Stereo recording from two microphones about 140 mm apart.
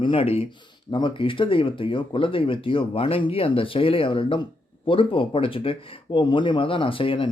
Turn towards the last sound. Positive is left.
turn(degrees=40)  # may be behind; listen again after turning